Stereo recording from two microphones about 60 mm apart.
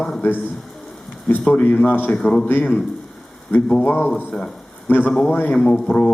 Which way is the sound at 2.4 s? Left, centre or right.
Left.